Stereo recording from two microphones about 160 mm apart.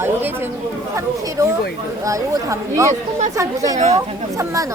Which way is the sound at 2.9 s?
45° right (ahead or behind).